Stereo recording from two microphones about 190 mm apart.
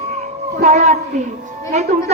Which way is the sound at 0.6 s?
40° right (ahead or behind).